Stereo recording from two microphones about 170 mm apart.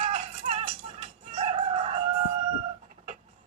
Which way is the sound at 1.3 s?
35° right (ahead or behind).